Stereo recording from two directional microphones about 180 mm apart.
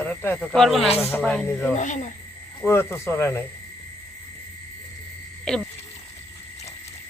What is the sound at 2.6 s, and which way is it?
Speech, 15° left (ahead or behind).